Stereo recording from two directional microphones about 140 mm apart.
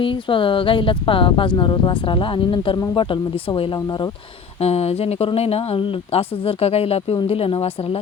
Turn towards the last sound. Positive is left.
turn(degrees=40)  # may be behind; listen again after turning